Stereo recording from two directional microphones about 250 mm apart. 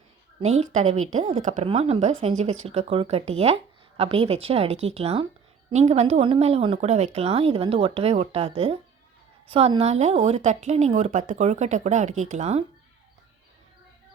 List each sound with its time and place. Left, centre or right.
0.3 s a woman's voice: right